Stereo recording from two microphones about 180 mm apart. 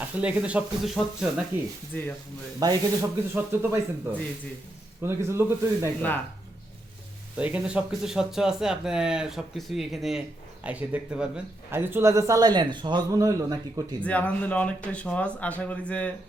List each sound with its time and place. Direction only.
0.0 s speech: 10° right (ahead or behind)
1.9 s speech: 10° left (ahead or behind)
2.6 s speech: 20° right (ahead or behind)
7.3 s a man's voice: 5° right (ahead or behind)
14.0 s speech: 5° left (ahead or behind)